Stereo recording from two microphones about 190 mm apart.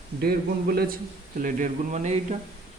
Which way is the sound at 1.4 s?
45° right (ahead or behind).